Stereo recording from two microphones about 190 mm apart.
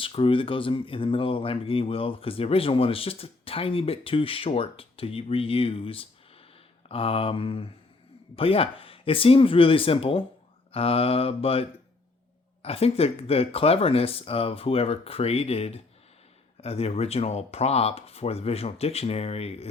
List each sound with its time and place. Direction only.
0.0 s speech: 30° left (ahead or behind)
12.6 s speech: 30° left (ahead or behind)